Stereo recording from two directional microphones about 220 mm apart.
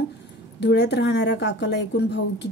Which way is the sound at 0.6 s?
50° left (ahead or behind).